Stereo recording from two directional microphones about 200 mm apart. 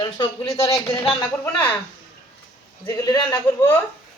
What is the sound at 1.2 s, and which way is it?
Speech, 10° left (ahead or behind).